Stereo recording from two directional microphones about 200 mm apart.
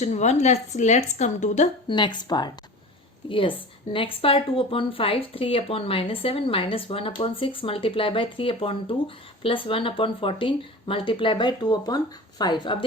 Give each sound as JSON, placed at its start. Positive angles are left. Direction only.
{"t": 0.0, "sound": "speech", "side_deg": 35}
{"t": 1.9, "sound": "speech", "side_deg": 20}